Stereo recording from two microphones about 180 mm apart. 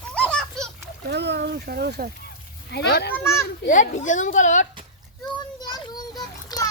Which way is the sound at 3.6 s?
45° left (ahead or behind).